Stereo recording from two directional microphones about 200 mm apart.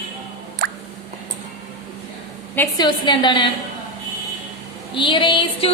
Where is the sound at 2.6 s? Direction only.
20° left (ahead or behind).